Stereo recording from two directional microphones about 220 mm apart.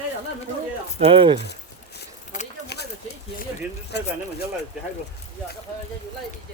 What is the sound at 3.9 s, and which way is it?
Speech, 50° left (ahead or behind).